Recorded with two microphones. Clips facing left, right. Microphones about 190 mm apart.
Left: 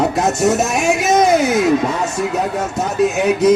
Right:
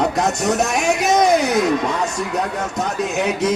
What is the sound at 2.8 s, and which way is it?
Speech, 5° left (ahead or behind).